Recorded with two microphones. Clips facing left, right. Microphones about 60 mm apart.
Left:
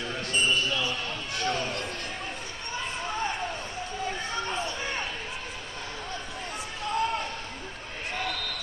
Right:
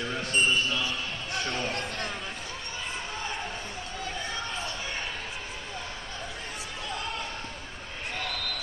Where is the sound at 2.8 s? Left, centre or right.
Centre.